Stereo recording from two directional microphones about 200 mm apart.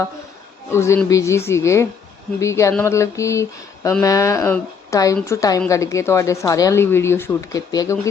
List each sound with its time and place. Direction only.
0.7 s a woman's voice: 15° left (ahead or behind)